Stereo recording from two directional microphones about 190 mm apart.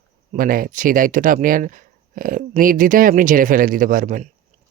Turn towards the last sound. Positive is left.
turn(degrees=-45)  # may be behind; listen again after turning